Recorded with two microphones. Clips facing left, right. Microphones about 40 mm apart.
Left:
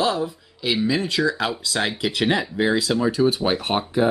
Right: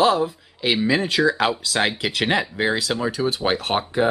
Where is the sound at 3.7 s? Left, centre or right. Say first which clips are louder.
Right 1 dB; centre.